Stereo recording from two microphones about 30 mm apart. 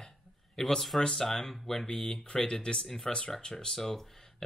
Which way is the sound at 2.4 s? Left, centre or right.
Left.